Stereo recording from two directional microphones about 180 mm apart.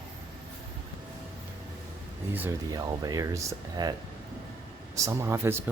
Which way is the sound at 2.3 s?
15° right (ahead or behind).